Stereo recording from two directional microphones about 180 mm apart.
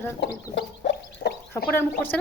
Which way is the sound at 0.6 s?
70° left (ahead or behind).